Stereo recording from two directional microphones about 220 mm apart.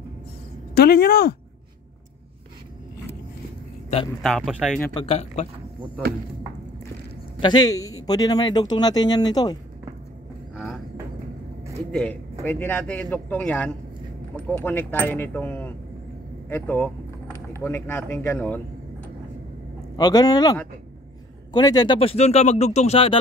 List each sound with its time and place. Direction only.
0.7 s speech: 45° left (ahead or behind)
4.2 s speech: centre (ahead or behind)
4.9 s speech: 30° left (ahead or behind)
7.3 s speech: 20° left (ahead or behind)
10.5 s vehicle: 5° left (ahead or behind)
11.9 s speech: 5° left (ahead or behind)
20.0 s speech: 20° left (ahead or behind)
21.5 s speech: 20° left (ahead or behind)